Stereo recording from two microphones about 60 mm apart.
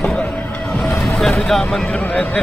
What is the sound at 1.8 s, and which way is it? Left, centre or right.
Speech, left.